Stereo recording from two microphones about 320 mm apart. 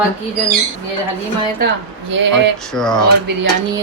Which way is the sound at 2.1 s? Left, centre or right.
Right.